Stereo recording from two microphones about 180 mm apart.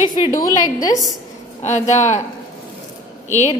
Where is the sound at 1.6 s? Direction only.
40° left (ahead or behind).